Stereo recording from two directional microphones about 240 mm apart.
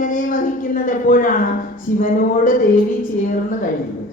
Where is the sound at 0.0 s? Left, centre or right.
Left.